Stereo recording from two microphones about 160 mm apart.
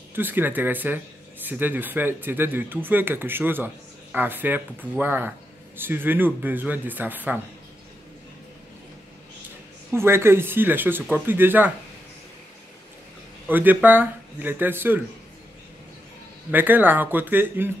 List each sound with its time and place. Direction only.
0.1 s speech: 10° right (ahead or behind)
9.9 s speech: 15° right (ahead or behind)
13.5 s speech: 10° right (ahead or behind)
16.5 s speech: 10° right (ahead or behind)